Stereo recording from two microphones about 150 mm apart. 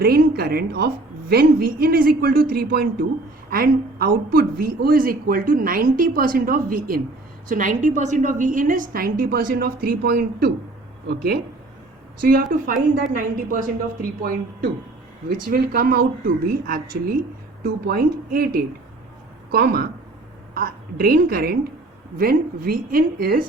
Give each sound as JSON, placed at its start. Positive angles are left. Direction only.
{"t": 0.0, "sound": "a woman's voice", "side_deg": -90}
{"t": 12.2, "sound": "a woman's voice", "side_deg": -75}
{"t": 20.5, "sound": "a woman's voice", "side_deg": -75}
{"t": 22.2, "sound": "speech", "side_deg": -75}